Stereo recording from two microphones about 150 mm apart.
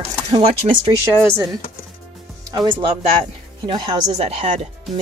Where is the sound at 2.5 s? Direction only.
30° right (ahead or behind).